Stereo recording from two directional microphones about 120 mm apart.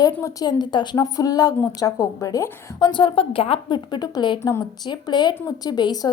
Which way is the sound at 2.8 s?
45° left (ahead or behind).